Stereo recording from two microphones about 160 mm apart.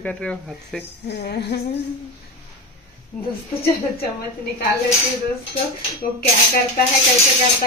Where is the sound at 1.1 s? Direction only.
90° left.